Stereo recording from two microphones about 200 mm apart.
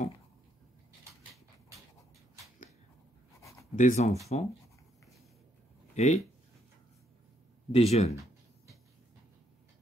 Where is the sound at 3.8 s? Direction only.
35° left (ahead or behind).